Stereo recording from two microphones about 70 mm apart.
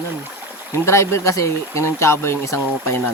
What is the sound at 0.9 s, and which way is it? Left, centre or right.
Speech, left.